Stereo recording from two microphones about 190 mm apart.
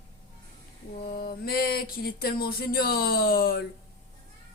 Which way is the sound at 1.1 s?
55° left (ahead or behind).